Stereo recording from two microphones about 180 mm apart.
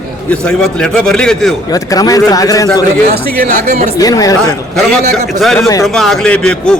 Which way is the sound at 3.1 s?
50° right (ahead or behind).